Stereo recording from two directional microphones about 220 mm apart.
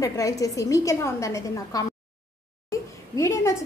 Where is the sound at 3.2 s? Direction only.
15° left (ahead or behind).